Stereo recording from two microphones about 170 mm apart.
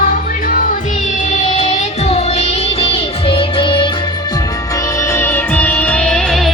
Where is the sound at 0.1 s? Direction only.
55° left (ahead or behind); by 3.9 s 30° left (ahead or behind).